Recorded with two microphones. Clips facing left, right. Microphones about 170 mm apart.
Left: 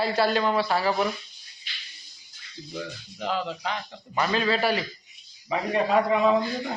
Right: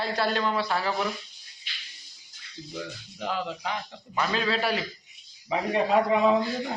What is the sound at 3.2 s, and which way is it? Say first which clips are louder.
Speech: left 2 dB; 15° right (ahead or behind).